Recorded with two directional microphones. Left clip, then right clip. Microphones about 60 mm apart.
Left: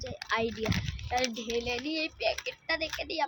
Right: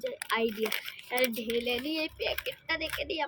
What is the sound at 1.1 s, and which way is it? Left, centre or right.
Female singing, left.